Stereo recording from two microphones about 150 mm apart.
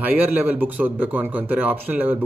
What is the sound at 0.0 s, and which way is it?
A man's voice, 10° right (ahead or behind).